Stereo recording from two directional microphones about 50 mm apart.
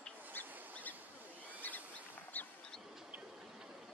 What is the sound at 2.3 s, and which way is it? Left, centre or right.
Vehicle, left.